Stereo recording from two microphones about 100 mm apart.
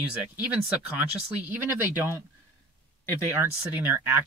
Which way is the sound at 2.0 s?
25° right (ahead or behind).